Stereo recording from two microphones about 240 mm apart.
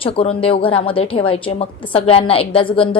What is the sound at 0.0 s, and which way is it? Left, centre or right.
A woman's voice, left.